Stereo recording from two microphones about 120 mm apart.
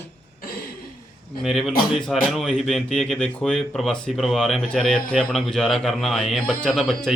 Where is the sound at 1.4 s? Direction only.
Centre (ahead or behind).